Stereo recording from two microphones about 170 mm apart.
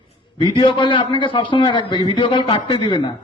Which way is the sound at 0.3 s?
30° left (ahead or behind).